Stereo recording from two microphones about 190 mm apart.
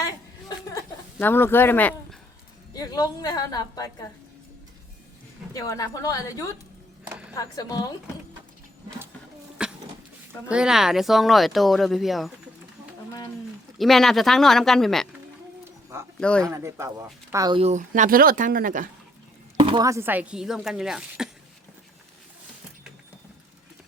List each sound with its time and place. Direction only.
0.0 s a sound: 20° left (ahead or behind)
1.2 s speech: 10° left (ahead or behind)
2.7 s a woman's voice: 20° left (ahead or behind)
5.5 s a woman's voice: 20° left (ahead or behind)
7.1 s music: 5° right (ahead or behind)
7.3 s a woman's voice: 20° left (ahead or behind)
9.6 s cough: 5° right (ahead or behind)
10.5 s speech: 5° right (ahead or behind)
13.7 s speech: centre (ahead or behind)
16.2 s speech: 5° left (ahead or behind)
16.5 s speech: 15° right (ahead or behind)
17.6 s speech: 40° right (ahead or behind)
19.5 s speech: 25° right (ahead or behind); by 21.2 s 5° right (ahead or behind)